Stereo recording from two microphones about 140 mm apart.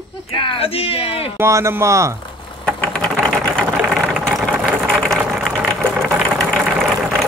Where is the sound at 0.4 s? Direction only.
40° left (ahead or behind).